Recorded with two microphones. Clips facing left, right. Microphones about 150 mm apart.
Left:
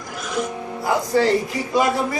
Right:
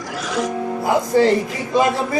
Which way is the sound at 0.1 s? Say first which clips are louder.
Right 3 dB; 80° right.